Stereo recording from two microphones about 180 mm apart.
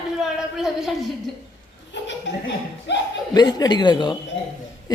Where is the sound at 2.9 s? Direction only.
75° left (ahead or behind).